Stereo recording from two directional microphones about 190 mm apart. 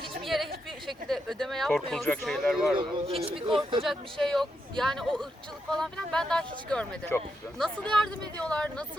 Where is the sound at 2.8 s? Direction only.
30° right (ahead or behind).